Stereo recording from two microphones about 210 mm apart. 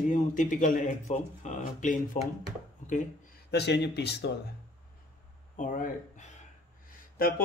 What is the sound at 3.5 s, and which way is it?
Speech, 55° left (ahead or behind).